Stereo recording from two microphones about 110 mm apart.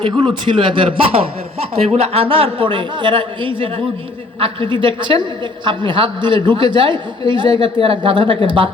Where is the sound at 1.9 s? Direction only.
65° right (ahead or behind).